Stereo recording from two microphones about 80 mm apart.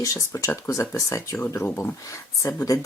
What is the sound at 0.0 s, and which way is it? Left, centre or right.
Speech, left.